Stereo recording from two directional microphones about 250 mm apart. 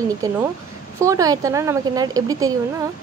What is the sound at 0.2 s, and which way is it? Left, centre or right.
A woman's voice, centre.